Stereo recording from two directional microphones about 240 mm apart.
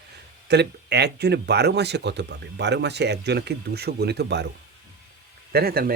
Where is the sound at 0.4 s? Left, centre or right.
Right.